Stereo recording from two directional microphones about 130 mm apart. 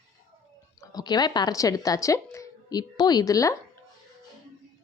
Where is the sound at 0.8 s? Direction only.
30° left (ahead or behind).